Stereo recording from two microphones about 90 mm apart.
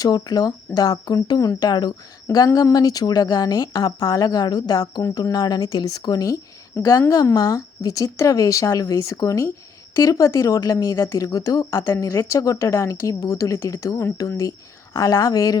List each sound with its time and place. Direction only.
0.0 s speech: 45° left (ahead or behind)
1.5 s speech: 50° left (ahead or behind)
2.2 s speech: 40° left (ahead or behind)
6.8 s a woman's voice: 30° left (ahead or behind)
7.3 s speech: 45° left (ahead or behind)